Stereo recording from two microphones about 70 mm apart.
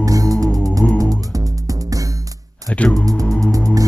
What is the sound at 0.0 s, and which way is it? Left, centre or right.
Music, right.